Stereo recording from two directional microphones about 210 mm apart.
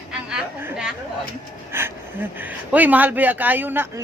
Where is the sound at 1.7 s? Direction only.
10° right (ahead or behind).